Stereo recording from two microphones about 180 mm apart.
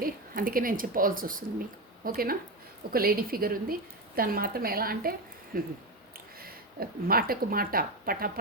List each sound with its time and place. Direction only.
0.0 s a woman's voice: 50° right (ahead or behind)